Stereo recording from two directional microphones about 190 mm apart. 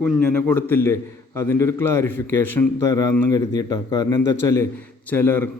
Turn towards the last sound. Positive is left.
turn(degrees=10)  # may be behind; listen again after turning